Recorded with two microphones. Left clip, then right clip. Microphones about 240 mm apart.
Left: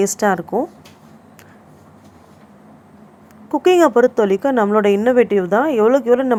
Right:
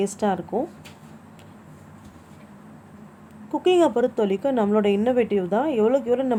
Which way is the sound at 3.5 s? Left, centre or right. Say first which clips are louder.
Left 7 dB; centre.